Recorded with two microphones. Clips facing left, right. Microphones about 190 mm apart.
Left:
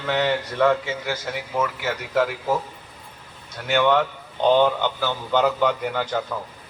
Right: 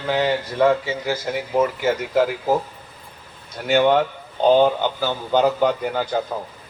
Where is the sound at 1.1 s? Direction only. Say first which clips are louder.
Right 7 dB; 35° right (ahead or behind).